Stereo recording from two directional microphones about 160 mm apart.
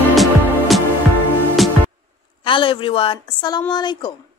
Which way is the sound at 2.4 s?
30° left (ahead or behind).